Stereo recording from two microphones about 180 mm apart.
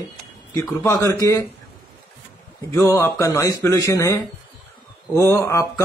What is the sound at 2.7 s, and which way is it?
Speech, 15° left (ahead or behind).